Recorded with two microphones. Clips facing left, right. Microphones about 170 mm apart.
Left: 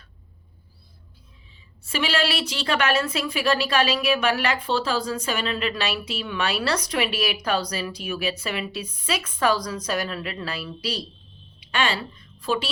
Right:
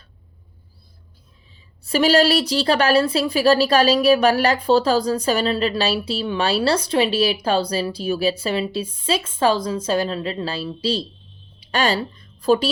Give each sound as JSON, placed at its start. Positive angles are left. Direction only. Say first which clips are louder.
{"t": 1.8, "sound": "a woman's voice", "louder": "right 9 dB", "side_deg": -40}